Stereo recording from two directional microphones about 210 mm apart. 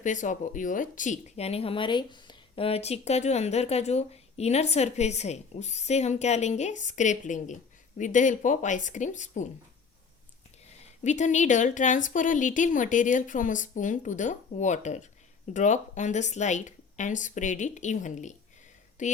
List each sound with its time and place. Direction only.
0.0 s speech: 35° left (ahead or behind)
10.7 s speech: 35° left (ahead or behind)